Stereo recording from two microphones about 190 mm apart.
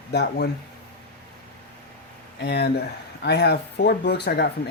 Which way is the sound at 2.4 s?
60° left (ahead or behind).